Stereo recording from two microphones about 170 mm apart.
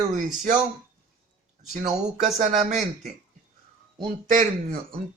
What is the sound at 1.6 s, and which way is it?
Speech, 45° right (ahead or behind).